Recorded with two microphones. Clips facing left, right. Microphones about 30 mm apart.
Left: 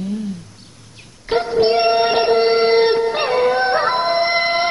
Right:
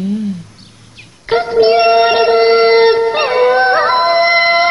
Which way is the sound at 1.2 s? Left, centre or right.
Right.